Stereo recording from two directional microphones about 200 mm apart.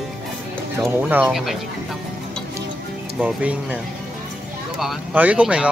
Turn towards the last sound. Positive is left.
turn(degrees=-5)  # may be behind; listen again after turning